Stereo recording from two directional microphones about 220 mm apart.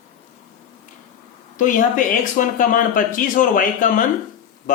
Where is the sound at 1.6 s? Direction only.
35° left (ahead or behind).